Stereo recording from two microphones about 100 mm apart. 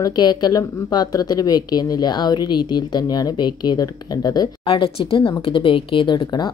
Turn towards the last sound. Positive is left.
turn(degrees=45)  # may be behind; listen again after turning